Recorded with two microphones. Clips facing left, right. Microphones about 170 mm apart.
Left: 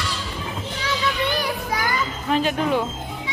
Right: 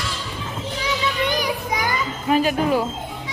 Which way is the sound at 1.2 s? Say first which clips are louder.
Right 1 dB; 15° right (ahead or behind).